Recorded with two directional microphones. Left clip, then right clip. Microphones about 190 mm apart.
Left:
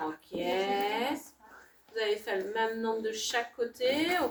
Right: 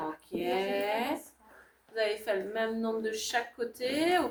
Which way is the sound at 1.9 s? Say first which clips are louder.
Right 1 dB; 25° right (ahead or behind).